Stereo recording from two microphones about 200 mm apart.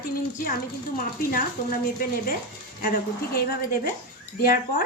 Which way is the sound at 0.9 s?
45° left (ahead or behind).